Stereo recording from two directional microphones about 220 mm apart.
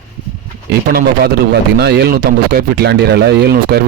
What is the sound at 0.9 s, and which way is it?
Speech, 45° right (ahead or behind).